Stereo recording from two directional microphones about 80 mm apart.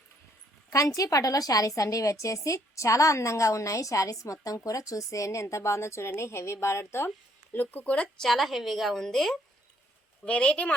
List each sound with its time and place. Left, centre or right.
0.7 s a woman's voice: left; by 8.0 s centre
8.2 s a woman's voice: centre